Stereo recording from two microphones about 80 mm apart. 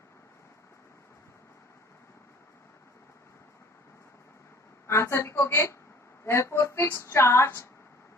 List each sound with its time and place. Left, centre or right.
4.9 s a woman's voice: left
6.2 s music: left
6.9 s a woman's voice: left